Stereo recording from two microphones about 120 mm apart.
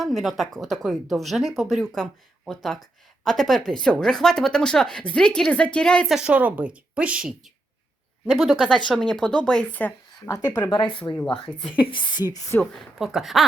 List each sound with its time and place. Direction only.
0.0 s speech: centre (ahead or behind)
6.1 s a woman's voice: 10° right (ahead or behind); by 9.9 s 10° left (ahead or behind)
10.2 s a woman's voice: 30° left (ahead or behind)
11.1 s speech: 15° left (ahead or behind)
11.9 s a woman's voice: 40° left (ahead or behind)
12.7 s speech: centre (ahead or behind)